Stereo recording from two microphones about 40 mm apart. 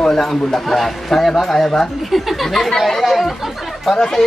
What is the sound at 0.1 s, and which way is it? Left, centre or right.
Speech, centre.